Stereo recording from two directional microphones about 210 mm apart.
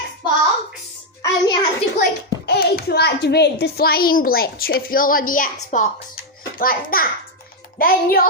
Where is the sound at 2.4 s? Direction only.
50° left (ahead or behind).